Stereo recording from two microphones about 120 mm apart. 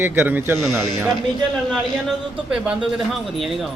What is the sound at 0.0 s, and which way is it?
Speech, 15° right (ahead or behind).